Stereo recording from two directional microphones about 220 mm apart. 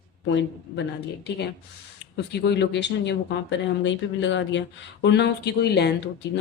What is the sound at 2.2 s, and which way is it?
Speech, 50° left (ahead or behind).